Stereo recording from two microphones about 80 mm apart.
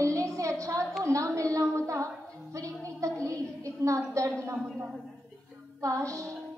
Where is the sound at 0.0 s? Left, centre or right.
Right.